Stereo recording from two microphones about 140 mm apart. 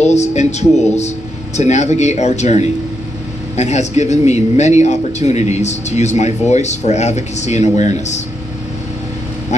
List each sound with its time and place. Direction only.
0.0 s a man's voice: 55° left (ahead or behind)